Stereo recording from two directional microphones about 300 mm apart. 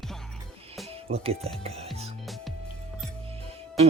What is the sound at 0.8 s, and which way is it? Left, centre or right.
Speech, centre.